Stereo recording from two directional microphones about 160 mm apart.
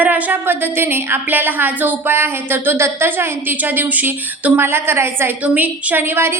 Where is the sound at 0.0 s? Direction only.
10° right (ahead or behind).